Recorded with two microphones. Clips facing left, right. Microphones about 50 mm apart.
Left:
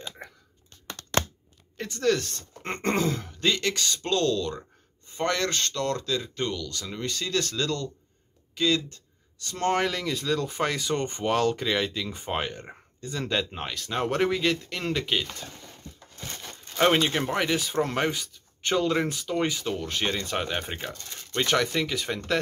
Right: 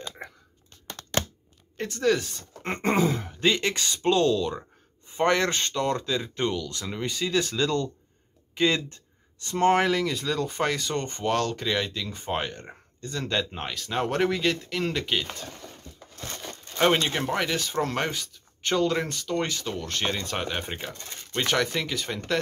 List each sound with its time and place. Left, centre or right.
1.9 s speech: centre